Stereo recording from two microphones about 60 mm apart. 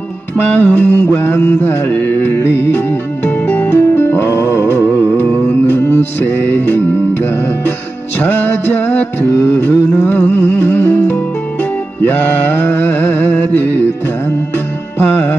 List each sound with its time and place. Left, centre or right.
0.6 s music: left
5.7 s music: left
15.0 s music: left